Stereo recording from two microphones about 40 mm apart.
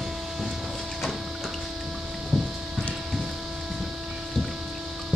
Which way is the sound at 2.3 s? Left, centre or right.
Centre.